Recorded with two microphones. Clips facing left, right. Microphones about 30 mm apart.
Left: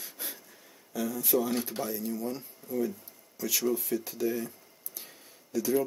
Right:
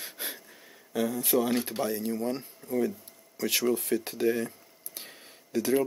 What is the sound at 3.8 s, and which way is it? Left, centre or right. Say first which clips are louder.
Speech: right 3 dB; right.